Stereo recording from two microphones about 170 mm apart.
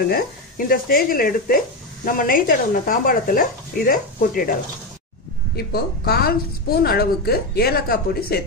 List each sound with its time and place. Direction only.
0.1 s a woman's voice: 60° left (ahead or behind)
5.7 s a woman's voice: 65° left (ahead or behind)